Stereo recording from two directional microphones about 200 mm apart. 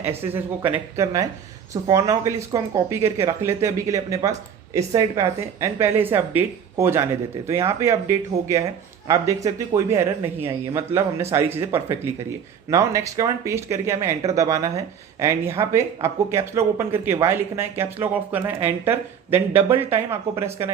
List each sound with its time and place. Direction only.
0.3 s speech: 10° right (ahead or behind)